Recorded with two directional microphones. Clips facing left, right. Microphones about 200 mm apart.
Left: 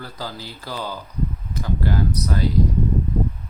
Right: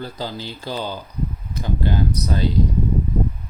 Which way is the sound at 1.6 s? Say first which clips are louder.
Right 1 dB; 20° right (ahead or behind).